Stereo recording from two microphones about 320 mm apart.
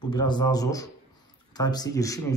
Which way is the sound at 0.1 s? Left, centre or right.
Centre.